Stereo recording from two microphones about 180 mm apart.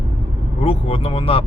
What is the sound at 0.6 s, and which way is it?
Speech, 30° left (ahead or behind).